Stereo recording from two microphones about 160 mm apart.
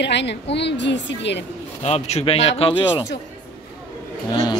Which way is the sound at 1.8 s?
45° left (ahead or behind).